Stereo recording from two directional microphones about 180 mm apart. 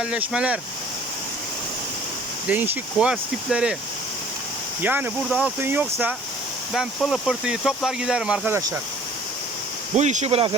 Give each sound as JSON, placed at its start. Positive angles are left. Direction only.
{"t": 0.0, "sound": "speech", "side_deg": -5}
{"t": 2.5, "sound": "speech", "side_deg": -10}
{"t": 4.8, "sound": "speech", "side_deg": -10}
{"t": 10.0, "sound": "speech", "side_deg": -40}